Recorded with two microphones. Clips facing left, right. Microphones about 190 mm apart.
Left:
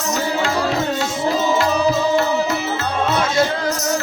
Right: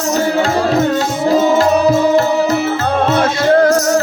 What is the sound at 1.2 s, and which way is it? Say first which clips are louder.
Music: right 7 dB; 50° right (ahead or behind).